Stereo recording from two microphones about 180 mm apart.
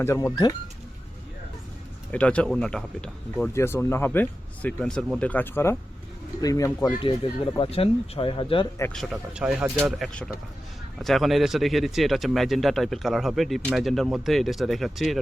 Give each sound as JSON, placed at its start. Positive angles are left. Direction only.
{"t": 0.0, "sound": "speech", "side_deg": 15}
{"t": 2.1, "sound": "speech", "side_deg": 5}
{"t": 7.5, "sound": "speech", "side_deg": 30}
{"t": 8.8, "sound": "speech", "side_deg": 5}